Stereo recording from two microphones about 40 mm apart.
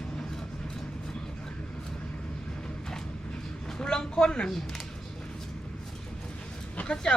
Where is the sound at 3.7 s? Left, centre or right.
Centre.